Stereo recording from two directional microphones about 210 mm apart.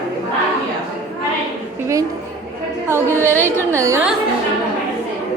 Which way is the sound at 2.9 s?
10° right (ahead or behind).